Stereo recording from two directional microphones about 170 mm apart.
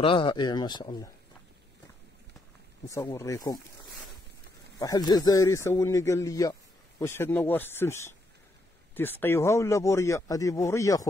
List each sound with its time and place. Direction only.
0.0 s speech: 30° left (ahead or behind)
2.9 s speech: 20° left (ahead or behind)
4.7 s speech: 20° left (ahead or behind)